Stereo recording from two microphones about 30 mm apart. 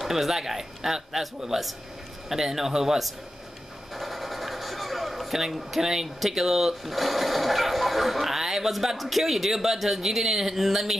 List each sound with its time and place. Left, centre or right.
0.0 s speech: centre
3.9 s a sound: centre
5.8 s speech: centre